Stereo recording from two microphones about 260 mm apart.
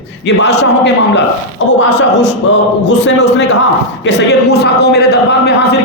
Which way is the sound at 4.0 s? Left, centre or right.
Left.